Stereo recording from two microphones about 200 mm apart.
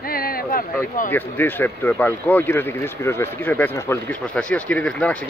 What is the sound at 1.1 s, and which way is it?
Speech, 10° left (ahead or behind).